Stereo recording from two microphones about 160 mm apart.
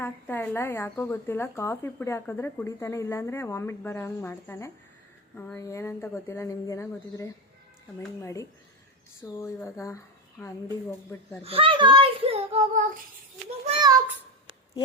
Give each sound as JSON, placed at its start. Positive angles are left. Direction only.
{"t": 0.0, "sound": "speech", "side_deg": 10}
{"t": 5.5, "sound": "speech", "side_deg": 20}
{"t": 11.4, "sound": "a child's voice", "side_deg": -35}